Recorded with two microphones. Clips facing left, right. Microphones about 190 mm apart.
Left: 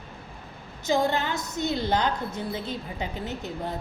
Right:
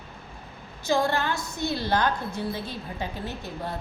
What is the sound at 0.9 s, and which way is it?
A woman's voice, 20° left (ahead or behind).